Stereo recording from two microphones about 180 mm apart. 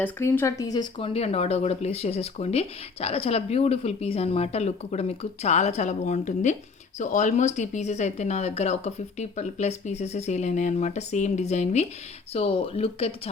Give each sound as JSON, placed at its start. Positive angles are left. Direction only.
{"t": 0.0, "sound": "speech", "side_deg": 10}